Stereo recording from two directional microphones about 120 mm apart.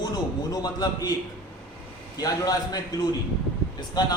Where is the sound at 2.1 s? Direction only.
30° left (ahead or behind).